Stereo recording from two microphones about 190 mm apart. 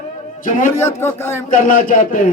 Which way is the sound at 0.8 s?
15° left (ahead or behind).